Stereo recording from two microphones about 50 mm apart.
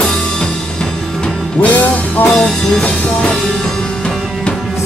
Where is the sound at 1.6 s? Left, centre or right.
Left.